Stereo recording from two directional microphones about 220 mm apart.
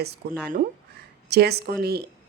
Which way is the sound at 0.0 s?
45° right (ahead or behind).